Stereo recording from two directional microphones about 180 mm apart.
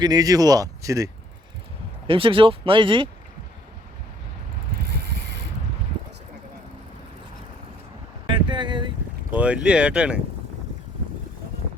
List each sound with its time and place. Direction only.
0.0 s speech: 20° right (ahead or behind)
2.0 s speech: 30° right (ahead or behind)
8.3 s vehicle: 25° right (ahead or behind)
9.3 s speech: 5° right (ahead or behind)